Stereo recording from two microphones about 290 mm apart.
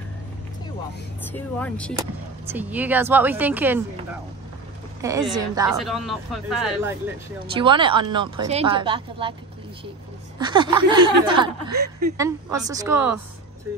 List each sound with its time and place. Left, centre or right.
1.3 s speech: centre
2.0 s speech: centre
5.3 s speech: centre
5.7 s speech: centre
7.5 s speech: centre
10.4 s speech: centre